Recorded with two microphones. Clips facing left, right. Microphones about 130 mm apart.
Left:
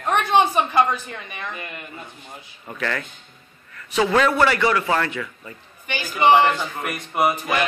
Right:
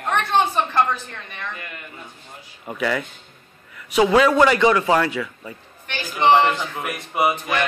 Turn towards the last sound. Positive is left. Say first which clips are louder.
# even
turn(degrees=0)  # may be behind; listen again after turning